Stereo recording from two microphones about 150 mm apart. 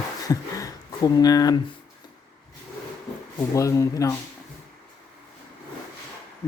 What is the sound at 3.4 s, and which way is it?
Speech, 20° left (ahead or behind).